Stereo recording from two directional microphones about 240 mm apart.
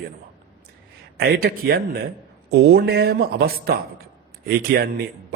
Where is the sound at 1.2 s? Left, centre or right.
Right.